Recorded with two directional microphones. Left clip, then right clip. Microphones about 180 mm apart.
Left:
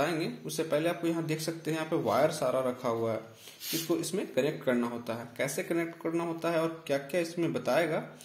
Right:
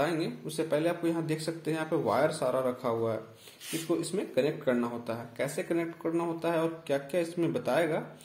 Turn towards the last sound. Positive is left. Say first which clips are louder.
# even
turn(degrees=-10)  # may be behind; listen again after turning